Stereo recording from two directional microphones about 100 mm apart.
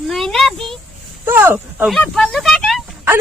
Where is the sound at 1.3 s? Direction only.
20° right (ahead or behind).